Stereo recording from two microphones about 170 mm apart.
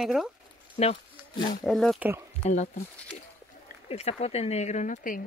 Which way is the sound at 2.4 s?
45° left (ahead or behind).